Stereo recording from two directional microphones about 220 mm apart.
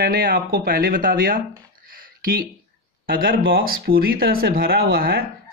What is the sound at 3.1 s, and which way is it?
Speech, 40° right (ahead or behind).